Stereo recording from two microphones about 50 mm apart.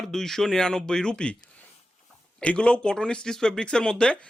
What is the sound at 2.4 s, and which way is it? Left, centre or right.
Speech, left.